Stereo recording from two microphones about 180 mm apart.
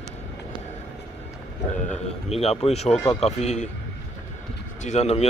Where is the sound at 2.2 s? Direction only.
35° left (ahead or behind).